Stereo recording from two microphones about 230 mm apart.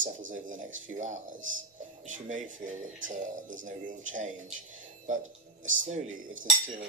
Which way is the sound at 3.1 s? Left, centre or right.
Right.